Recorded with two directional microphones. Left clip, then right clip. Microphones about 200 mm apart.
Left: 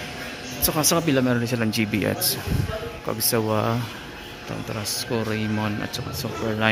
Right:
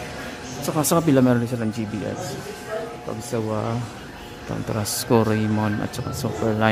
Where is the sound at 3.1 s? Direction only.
15° left (ahead or behind).